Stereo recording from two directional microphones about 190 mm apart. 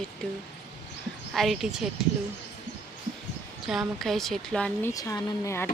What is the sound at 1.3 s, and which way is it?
Speech, centre (ahead or behind).